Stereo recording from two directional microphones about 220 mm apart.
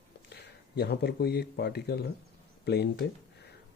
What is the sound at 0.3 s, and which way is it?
Speech, 50° left (ahead or behind).